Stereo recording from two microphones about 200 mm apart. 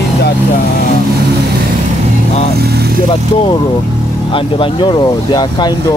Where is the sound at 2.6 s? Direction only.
55° right (ahead or behind).